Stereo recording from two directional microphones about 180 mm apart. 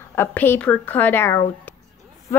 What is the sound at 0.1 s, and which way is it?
Speech, 10° left (ahead or behind).